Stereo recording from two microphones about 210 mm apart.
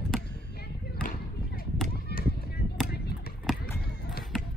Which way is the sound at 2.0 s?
50° left (ahead or behind).